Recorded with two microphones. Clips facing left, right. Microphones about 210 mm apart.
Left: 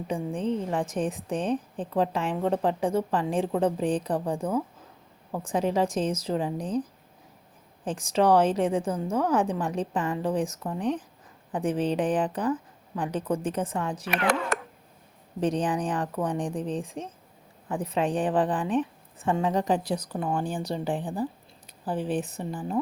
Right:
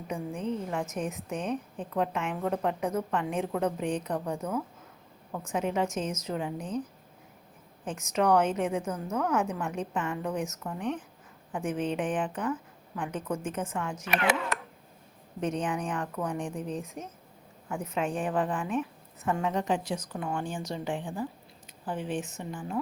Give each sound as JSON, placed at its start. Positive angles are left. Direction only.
{"t": 0.1, "sound": "a woman's voice", "side_deg": 30}
{"t": 7.9, "sound": "a woman's voice", "side_deg": 30}
{"t": 14.5, "sound": "a sound", "side_deg": 45}
{"t": 15.4, "sound": "a woman's voice", "side_deg": 35}